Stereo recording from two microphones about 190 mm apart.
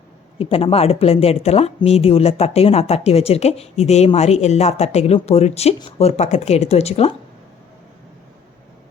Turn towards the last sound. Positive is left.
turn(degrees=35)  # may be behind; listen again after turning